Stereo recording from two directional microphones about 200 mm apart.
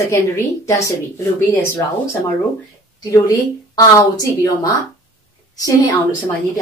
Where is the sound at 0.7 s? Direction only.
15° left (ahead or behind).